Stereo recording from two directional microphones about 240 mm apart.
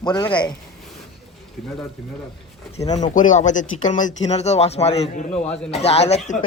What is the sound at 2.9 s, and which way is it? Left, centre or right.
Speech, left.